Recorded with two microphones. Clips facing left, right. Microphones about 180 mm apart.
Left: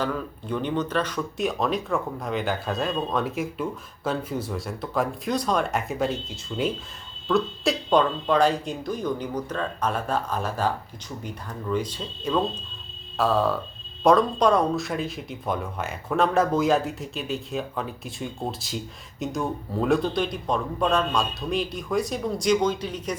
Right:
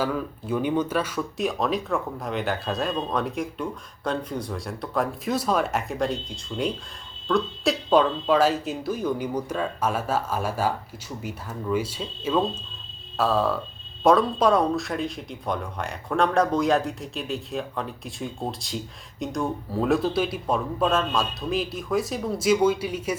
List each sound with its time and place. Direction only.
0.0 s speech: 5° right (ahead or behind)